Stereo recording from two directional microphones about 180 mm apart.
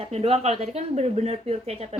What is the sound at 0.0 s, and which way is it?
Speech, 35° right (ahead or behind).